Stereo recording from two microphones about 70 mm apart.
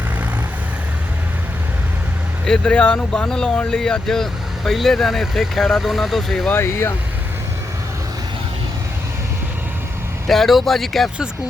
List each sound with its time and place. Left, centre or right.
2.5 s speech: centre
6.5 s speech: left
10.2 s speech: centre